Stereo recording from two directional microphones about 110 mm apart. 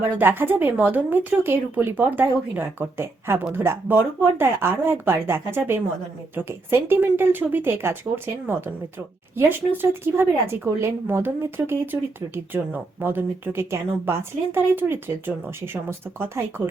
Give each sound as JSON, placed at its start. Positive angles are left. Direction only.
{"t": 0.2, "sound": "speech", "side_deg": -20}